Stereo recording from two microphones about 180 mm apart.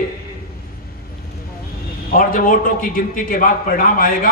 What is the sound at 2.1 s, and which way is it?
A man's voice, 50° left (ahead or behind).